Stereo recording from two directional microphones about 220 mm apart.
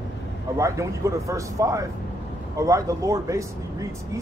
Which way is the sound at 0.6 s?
15° right (ahead or behind).